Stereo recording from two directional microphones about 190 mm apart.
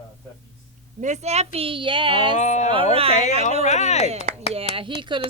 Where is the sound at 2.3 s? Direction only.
40° left (ahead or behind).